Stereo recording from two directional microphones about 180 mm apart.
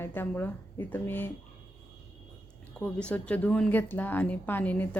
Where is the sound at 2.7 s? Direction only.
5° left (ahead or behind).